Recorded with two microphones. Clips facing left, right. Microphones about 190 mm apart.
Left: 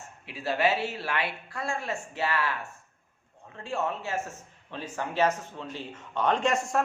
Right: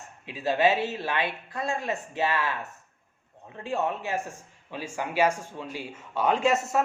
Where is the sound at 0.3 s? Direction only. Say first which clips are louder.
Right 3 dB; 20° right (ahead or behind).